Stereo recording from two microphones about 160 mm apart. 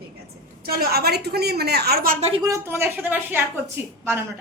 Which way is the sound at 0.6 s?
75° right (ahead or behind).